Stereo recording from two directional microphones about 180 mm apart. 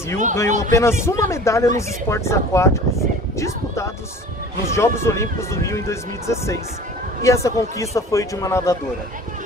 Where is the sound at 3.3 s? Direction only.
15° left (ahead or behind).